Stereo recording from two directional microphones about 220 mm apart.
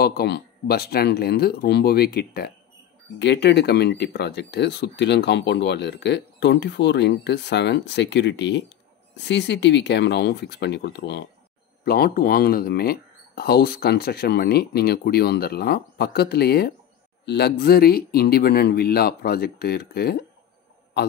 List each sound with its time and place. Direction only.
0.0 s speech: 45° left (ahead or behind)